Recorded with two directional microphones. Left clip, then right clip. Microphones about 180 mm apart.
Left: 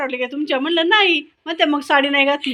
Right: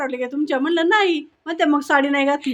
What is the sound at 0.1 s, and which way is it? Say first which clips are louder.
A woman's voice: left 1 dB; 20° right (ahead or behind).